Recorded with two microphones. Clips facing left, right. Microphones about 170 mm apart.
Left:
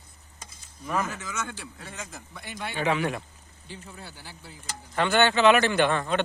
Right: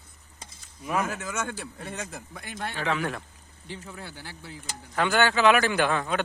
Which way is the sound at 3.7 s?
60° right (ahead or behind).